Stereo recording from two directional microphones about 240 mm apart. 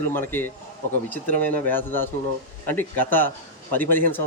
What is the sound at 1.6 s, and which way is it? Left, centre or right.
Speech, centre.